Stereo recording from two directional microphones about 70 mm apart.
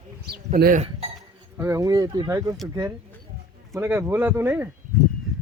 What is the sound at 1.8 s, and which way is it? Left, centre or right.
Speech, right.